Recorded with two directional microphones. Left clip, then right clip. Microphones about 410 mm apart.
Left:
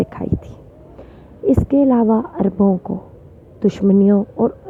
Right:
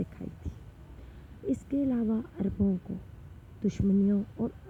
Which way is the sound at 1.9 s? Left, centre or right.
Centre.